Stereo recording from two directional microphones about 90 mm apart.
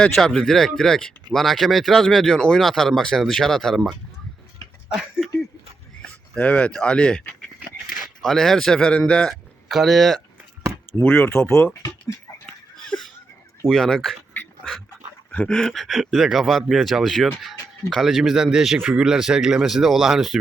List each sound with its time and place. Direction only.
0.0 s speech: 10° left (ahead or behind)
6.0 s speech: 15° left (ahead or behind)
7.9 s speech: centre (ahead or behind)
9.6 s speech: centre (ahead or behind)
11.0 s speech: 25° left (ahead or behind)
12.5 s a sound: 5° left (ahead or behind)
13.7 s speech: centre (ahead or behind)
15.3 s speech: 10° left (ahead or behind); by 20.4 s 5° right (ahead or behind)